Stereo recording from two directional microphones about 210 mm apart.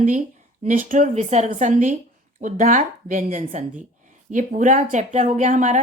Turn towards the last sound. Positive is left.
turn(degrees=-35)  # may be behind; listen again after turning